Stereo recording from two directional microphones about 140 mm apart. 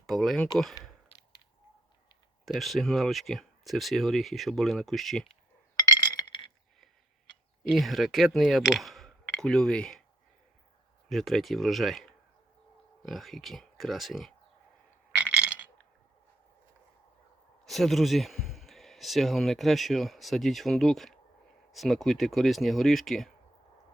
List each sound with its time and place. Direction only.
0.0 s speech: centre (ahead or behind)
2.4 s speech: centre (ahead or behind)
5.7 s chink: 25° left (ahead or behind)
7.6 s speech: centre (ahead or behind)
11.1 s speech: centre (ahead or behind)
15.1 s a sound: 10° right (ahead or behind)
17.7 s a man's voice: centre (ahead or behind)